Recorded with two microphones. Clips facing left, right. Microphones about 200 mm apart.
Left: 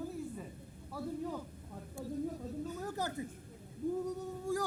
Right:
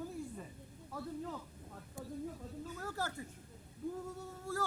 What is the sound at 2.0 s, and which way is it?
Speech, 20° right (ahead or behind).